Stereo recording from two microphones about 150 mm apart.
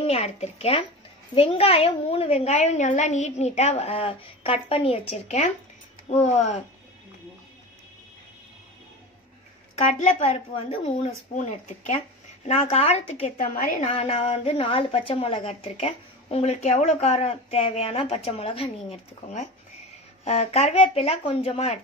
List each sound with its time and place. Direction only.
0.0 s a woman's voice: 45° left (ahead or behind)
9.9 s a woman's voice: 45° left (ahead or behind)
11.3 s a woman's voice: 50° left (ahead or behind)
13.4 s a woman's voice: 65° left (ahead or behind)
13.8 s a woman's voice: 45° left (ahead or behind)
20.2 s a woman's voice: 45° left (ahead or behind)